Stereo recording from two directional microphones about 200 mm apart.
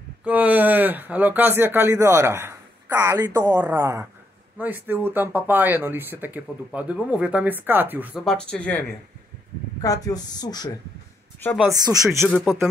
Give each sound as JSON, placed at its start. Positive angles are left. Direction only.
{"t": 0.2, "sound": "speech", "side_deg": -5}
{"t": 8.1, "sound": "speech", "side_deg": 5}
{"t": 9.8, "sound": "a woman's voice", "side_deg": 20}
{"t": 11.7, "sound": "speech", "side_deg": -15}
{"t": 12.3, "sound": "speech", "side_deg": 5}